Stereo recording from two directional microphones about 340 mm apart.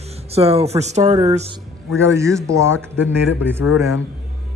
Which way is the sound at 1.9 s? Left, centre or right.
Centre.